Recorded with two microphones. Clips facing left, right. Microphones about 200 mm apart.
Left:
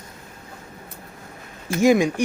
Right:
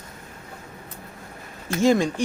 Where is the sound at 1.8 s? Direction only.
15° left (ahead or behind).